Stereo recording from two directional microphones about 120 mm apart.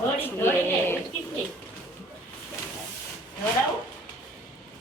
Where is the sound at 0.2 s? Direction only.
20° left (ahead or behind).